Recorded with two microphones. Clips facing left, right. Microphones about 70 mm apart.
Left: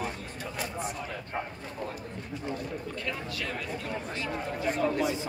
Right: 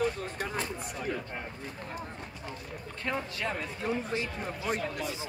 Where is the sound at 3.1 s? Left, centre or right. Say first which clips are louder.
Right 5 dB; right.